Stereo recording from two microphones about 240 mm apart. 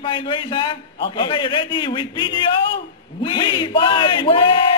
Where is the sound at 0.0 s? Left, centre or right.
Centre.